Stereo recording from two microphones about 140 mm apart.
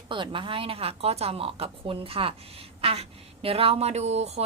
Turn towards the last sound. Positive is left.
turn(degrees=-50)  # may be behind; listen again after turning